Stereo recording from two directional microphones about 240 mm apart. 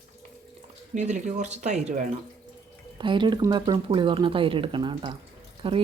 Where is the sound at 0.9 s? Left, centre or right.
Right.